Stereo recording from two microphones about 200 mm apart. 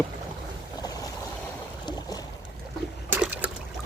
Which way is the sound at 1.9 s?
20° left (ahead or behind).